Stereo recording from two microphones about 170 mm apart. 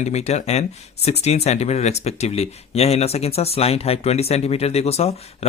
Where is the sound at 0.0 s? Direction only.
40° left (ahead or behind).